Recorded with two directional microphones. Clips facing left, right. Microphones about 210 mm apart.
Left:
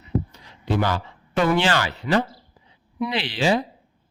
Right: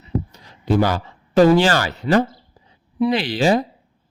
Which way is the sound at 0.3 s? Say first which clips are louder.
Right 5 dB; 40° right (ahead or behind).